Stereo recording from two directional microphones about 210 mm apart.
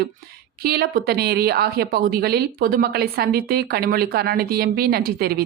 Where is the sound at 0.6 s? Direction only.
45° right (ahead or behind).